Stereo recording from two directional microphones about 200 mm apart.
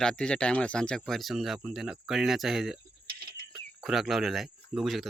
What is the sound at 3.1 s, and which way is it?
Cricket, 50° right (ahead or behind).